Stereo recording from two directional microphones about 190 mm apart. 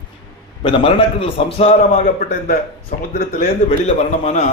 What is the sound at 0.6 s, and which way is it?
A man's voice, 25° left (ahead or behind).